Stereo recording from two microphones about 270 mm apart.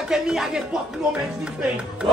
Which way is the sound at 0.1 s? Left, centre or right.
Centre.